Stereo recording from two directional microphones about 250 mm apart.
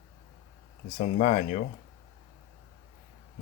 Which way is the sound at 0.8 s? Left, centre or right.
Left.